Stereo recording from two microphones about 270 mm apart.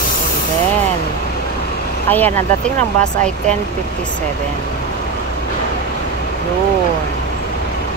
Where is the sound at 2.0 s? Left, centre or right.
Centre.